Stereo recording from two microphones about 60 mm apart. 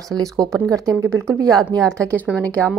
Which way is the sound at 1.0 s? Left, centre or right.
Right.